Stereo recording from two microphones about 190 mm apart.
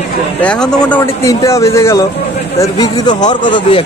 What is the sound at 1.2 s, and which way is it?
A man's voice, 15° left (ahead or behind).